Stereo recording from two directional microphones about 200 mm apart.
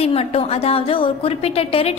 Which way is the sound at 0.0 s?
30° left (ahead or behind).